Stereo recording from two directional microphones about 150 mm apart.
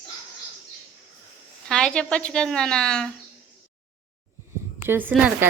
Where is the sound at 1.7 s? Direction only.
5° left (ahead or behind).